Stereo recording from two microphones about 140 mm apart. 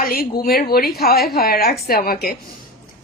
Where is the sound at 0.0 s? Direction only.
90° left.